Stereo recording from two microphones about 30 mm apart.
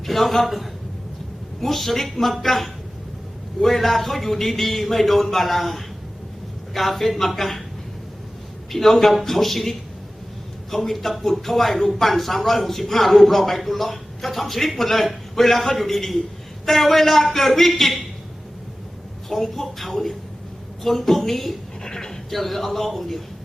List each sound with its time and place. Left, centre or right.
0.0 s a man's voice: centre
8.7 s a man's voice: centre
19.3 s a man's voice: centre
21.8 s a sound: centre
22.3 s a man's voice: centre